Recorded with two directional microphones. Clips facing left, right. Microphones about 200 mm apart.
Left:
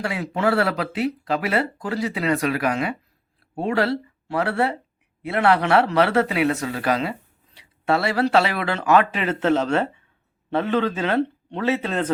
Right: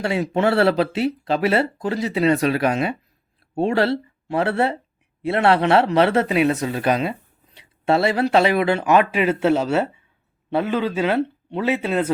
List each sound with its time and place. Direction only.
0.0 s speech: 25° right (ahead or behind)